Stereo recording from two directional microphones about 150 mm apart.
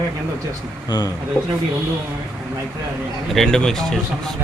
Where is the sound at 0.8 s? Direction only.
25° left (ahead or behind).